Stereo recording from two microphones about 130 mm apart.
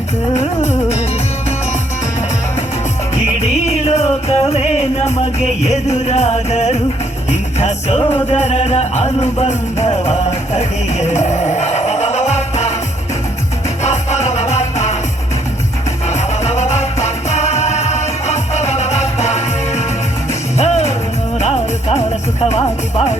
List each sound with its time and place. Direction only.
0.7 s music: 55° left (ahead or behind)
3.4 s music: 55° left (ahead or behind)
13.8 s music: 60° left (ahead or behind)
16.0 s music: 60° left (ahead or behind)